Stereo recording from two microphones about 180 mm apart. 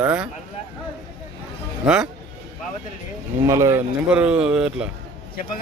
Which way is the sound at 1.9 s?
5° right (ahead or behind).